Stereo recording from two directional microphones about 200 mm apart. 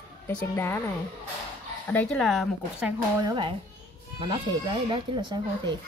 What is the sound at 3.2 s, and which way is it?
Speech, 25° right (ahead or behind).